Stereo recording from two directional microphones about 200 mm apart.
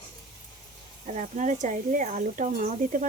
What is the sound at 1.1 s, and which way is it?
Speech, 35° right (ahead or behind).